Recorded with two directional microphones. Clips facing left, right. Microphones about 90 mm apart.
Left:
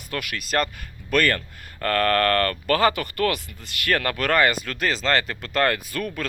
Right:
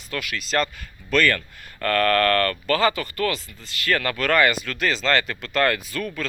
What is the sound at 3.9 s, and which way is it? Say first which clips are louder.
Speech: even; 45° left (ahead or behind).